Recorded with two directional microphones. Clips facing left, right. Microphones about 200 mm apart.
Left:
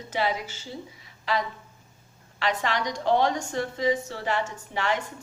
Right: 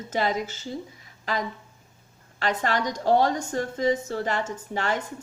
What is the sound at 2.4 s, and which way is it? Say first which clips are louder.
A woman's voice: right 2 dB; 45° right (ahead or behind).